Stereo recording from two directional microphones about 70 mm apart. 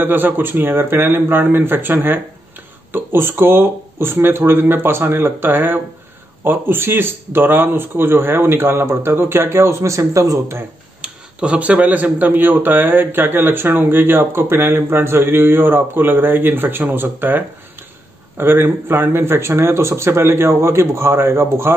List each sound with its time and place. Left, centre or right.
0.0 s a man's voice: right
11.0 s speech: centre
18.4 s speech: right